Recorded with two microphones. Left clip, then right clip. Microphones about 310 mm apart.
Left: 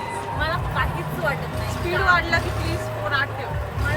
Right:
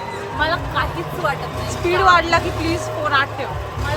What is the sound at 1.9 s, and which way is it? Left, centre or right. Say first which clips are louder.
Speech: right 6 dB; centre.